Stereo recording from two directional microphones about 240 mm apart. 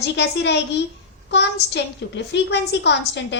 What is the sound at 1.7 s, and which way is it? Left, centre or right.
A woman's voice, left.